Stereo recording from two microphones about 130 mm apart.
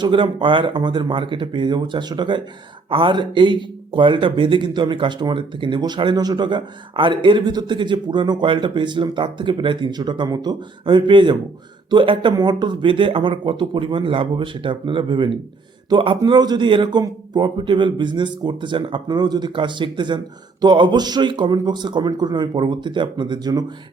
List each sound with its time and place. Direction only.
0.0 s speech: 35° right (ahead or behind)